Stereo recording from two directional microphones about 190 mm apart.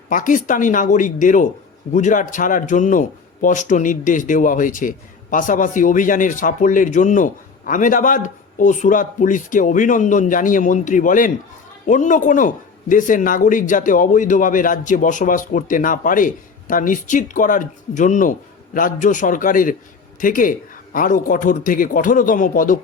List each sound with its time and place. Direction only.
0.1 s speech: 45° left (ahead or behind)